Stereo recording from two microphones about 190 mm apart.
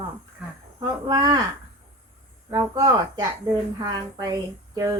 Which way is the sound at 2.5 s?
20° right (ahead or behind).